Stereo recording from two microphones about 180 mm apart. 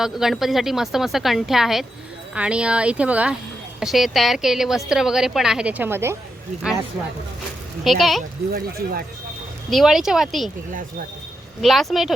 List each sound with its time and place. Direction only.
0.0 s a woman's voice: centre (ahead or behind)
7.9 s a woman's voice: centre (ahead or behind)
8.5 s speech: 55° right (ahead or behind)
9.6 s a woman's voice: centre (ahead or behind)
11.6 s a woman's voice: centre (ahead or behind)